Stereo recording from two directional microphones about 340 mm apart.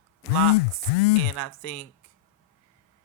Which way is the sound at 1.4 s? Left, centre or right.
Left.